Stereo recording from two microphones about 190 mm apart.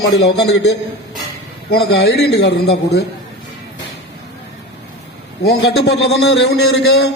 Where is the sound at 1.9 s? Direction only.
60° left (ahead or behind).